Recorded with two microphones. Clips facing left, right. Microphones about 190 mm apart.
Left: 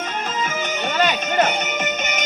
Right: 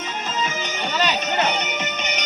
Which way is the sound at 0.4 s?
50° left (ahead or behind).